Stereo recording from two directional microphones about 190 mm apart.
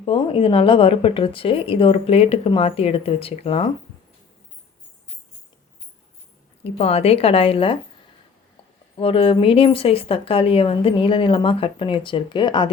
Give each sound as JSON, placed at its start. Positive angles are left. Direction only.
{"t": 0.0, "sound": "a woman's voice", "side_deg": 30}
{"t": 6.7, "sound": "a woman's voice", "side_deg": 30}
{"t": 9.0, "sound": "a woman's voice", "side_deg": 30}